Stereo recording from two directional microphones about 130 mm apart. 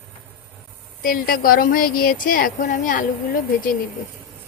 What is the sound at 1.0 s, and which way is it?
A woman's voice, 90° left.